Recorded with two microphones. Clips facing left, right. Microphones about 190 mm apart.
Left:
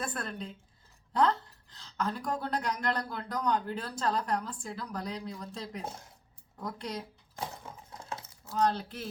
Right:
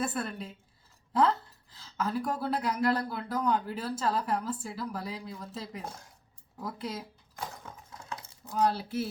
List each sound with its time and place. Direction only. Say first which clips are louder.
0.0 s speech: right 4 dB; 5° right (ahead or behind)
8.4 s speech: right 1 dB; 10° right (ahead or behind)